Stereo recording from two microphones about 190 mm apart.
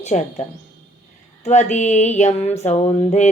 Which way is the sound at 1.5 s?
40° left (ahead or behind).